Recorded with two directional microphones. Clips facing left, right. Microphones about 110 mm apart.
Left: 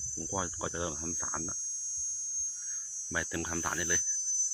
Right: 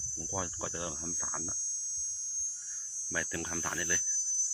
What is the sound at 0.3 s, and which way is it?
Insect, 10° left (ahead or behind).